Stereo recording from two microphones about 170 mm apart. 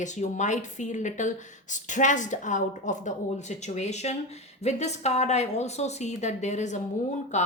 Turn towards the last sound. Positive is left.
turn(degrees=45)  # may be behind; listen again after turning